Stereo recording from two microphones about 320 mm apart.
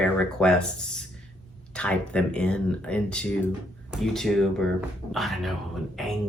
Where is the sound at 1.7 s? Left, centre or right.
Centre.